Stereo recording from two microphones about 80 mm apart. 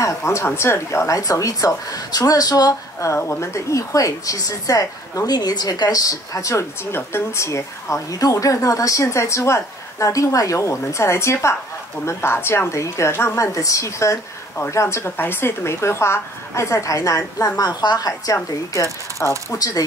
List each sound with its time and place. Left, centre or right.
0.0 s a woman's voice: left
3.0 s a woman's voice: left
6.9 s a woman's voice: left
13.6 s a woman's voice: left